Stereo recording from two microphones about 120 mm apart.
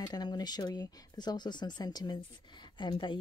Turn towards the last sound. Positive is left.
turn(degrees=40)  # may be behind; listen again after turning